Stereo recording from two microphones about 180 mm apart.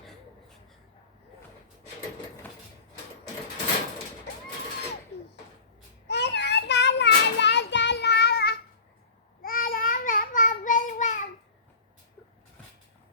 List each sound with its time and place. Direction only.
6.1 s child singing: 70° left (ahead or behind)
9.4 s child singing: 50° left (ahead or behind)